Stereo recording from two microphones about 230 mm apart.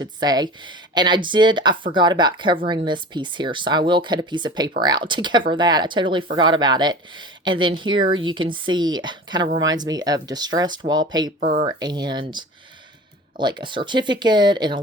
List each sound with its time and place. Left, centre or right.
0.0 s speech: centre
11.3 s speech: right
11.6 s speech: centre